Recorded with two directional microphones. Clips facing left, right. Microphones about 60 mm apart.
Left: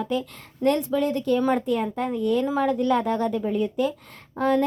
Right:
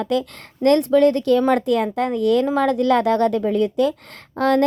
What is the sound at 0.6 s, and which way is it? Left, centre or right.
A woman's voice, right.